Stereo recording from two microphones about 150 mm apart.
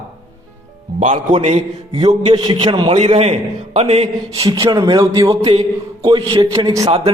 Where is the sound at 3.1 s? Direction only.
45° right (ahead or behind).